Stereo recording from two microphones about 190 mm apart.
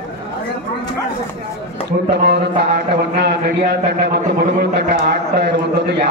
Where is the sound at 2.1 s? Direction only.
65° right (ahead or behind).